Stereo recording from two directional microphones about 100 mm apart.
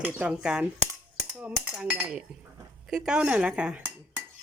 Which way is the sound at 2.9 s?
5° right (ahead or behind).